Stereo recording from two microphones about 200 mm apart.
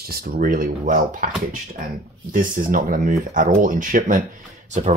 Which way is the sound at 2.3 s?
45° right (ahead or behind).